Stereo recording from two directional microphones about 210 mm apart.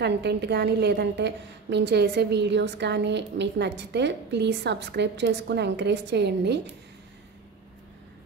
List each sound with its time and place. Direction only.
0.0 s a woman's voice: 55° right (ahead or behind)